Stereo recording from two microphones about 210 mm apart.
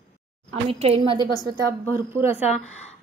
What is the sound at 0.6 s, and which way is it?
Speech, 30° right (ahead or behind).